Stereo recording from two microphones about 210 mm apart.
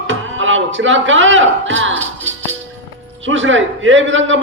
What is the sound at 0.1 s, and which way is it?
Speech, 65° right (ahead or behind).